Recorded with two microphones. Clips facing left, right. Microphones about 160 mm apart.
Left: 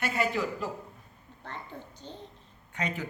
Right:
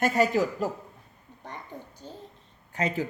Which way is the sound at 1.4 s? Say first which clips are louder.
Right 1 dB; 15° right (ahead or behind).